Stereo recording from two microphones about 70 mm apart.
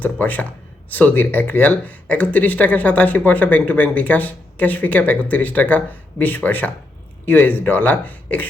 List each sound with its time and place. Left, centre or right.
0.0 s speech: left